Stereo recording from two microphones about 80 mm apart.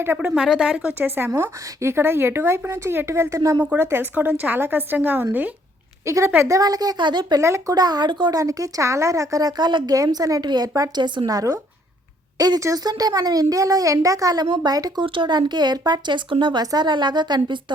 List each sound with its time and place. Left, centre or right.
0.0 s speech: right
0.3 s a woman's voice: centre
0.9 s a woman's voice: right
3.6 s speech: right
6.1 s a woman's voice: right
7.0 s speech: right
7.3 s a woman's voice: right
7.8 s speech: right
8.3 s speech: right
12.5 s a woman's voice: right
12.8 s speech: right
15.0 s speech: right